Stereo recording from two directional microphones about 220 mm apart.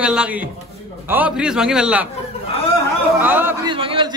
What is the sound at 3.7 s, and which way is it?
Speech, 25° right (ahead or behind).